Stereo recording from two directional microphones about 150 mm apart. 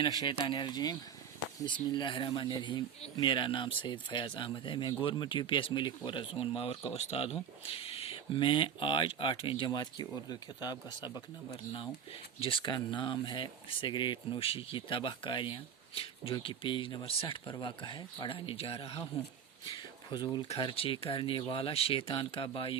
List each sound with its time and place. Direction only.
0.0 s speech: 30° left (ahead or behind)
12.4 s speech: 35° left (ahead or behind)
19.7 s a sound: 30° left (ahead or behind)
20.5 s speech: 35° left (ahead or behind)